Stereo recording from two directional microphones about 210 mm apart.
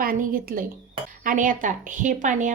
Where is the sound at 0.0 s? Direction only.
40° right (ahead or behind).